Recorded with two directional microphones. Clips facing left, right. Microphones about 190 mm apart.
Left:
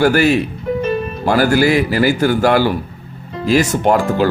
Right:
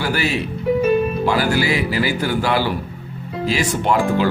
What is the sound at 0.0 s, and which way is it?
Speech, 50° left (ahead or behind).